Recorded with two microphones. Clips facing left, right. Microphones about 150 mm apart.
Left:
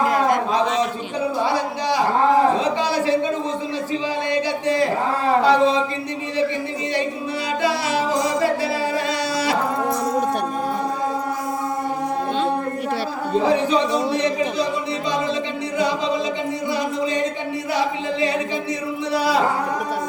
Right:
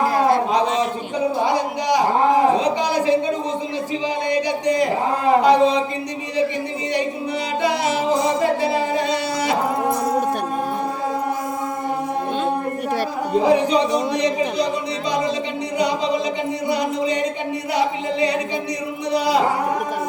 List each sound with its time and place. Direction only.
0.0 s a sound: 30° right (ahead or behind)
1.5 s a sound: 20° right (ahead or behind)
4.3 s speech: 15° right (ahead or behind)
7.6 s music: 20° right (ahead or behind)
13.4 s speech: 15° right (ahead or behind)
15.8 s a capella: 20° right (ahead or behind)
16.6 s music: 20° right (ahead or behind)
17.7 s a capella: 20° right (ahead or behind)
19.1 s a sound: 20° right (ahead or behind)